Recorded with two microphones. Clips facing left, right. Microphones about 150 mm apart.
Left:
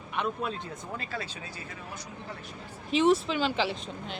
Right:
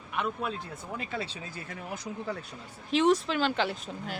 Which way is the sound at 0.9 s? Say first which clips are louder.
Right 3 dB; 20° right (ahead or behind).